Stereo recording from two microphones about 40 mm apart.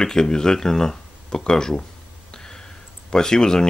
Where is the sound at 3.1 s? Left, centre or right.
Centre.